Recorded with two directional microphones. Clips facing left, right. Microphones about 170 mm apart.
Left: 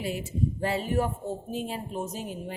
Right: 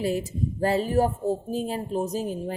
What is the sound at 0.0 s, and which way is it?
Speech, 40° right (ahead or behind).